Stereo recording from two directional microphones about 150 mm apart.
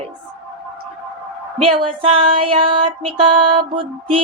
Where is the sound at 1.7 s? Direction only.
35° right (ahead or behind).